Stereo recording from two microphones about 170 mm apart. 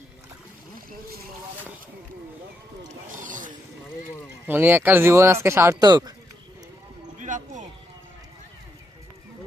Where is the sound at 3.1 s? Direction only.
50° right (ahead or behind).